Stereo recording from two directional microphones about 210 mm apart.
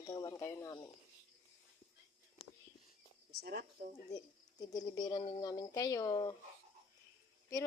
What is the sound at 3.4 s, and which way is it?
Speech, 45° right (ahead or behind).